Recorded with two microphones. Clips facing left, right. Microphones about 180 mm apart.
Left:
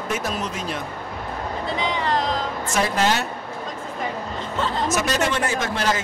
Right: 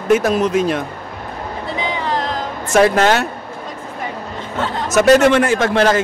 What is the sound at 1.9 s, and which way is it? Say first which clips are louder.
Music: right 2 dB; 5° right (ahead or behind).